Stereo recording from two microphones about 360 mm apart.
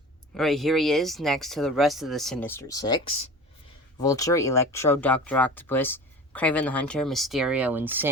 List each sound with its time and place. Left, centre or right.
0.3 s speech: centre